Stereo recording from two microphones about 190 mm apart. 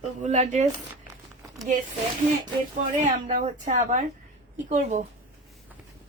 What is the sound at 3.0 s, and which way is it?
Speech, 45° right (ahead or behind).